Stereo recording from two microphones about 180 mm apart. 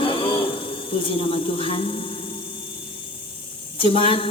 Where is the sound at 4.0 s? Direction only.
30° left (ahead or behind).